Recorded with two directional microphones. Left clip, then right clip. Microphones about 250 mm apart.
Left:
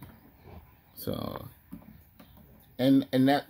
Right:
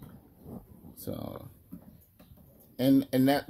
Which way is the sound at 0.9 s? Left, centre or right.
Centre.